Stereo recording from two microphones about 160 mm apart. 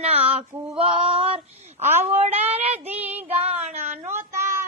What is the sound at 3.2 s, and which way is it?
Child singing, 40° right (ahead or behind).